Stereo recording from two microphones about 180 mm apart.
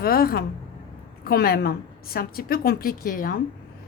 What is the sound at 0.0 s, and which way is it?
A woman's voice, 55° left (ahead or behind).